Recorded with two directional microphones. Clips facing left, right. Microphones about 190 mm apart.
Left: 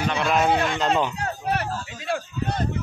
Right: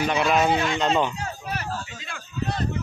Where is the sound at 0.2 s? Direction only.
Centre (ahead or behind).